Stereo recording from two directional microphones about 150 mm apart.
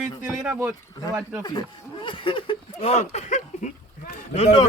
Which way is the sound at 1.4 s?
30° left (ahead or behind).